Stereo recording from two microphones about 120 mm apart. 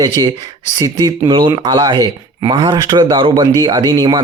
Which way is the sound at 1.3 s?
45° right (ahead or behind).